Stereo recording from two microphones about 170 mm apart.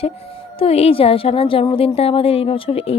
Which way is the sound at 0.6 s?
35° left (ahead or behind).